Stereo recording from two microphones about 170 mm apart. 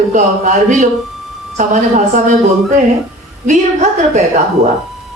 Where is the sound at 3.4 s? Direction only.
45° right (ahead or behind).